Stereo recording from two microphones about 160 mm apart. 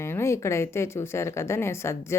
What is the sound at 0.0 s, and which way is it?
Speech, 15° left (ahead or behind).